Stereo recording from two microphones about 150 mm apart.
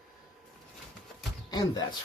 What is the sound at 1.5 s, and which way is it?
Speech, 25° left (ahead or behind).